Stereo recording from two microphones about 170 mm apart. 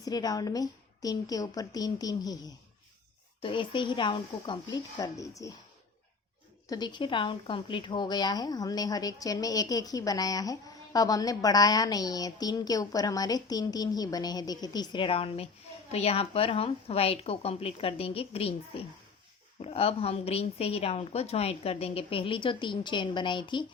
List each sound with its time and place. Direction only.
0.0 s speech: 20° left (ahead or behind)
3.4 s speech: 30° left (ahead or behind)
6.7 s speech: 25° left (ahead or behind)